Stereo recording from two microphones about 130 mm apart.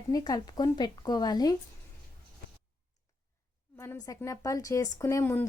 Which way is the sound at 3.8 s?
25° left (ahead or behind).